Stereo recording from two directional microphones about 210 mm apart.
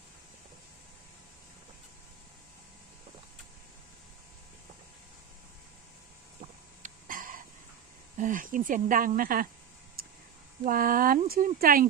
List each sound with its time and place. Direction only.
6.8 s a sound: 40° right (ahead or behind)
8.2 s speech: 40° right (ahead or behind)
10.6 s speech: 40° right (ahead or behind)